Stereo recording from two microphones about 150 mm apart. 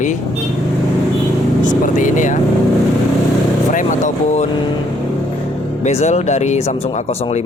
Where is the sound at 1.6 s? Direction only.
60° left (ahead or behind).